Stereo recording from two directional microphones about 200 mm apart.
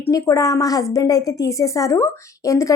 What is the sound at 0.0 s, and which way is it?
A woman's voice, 15° left (ahead or behind).